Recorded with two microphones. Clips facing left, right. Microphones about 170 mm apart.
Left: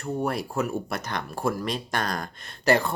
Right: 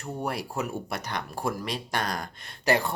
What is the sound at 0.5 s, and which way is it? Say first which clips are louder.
Speech: left 4 dB; 15° right (ahead or behind).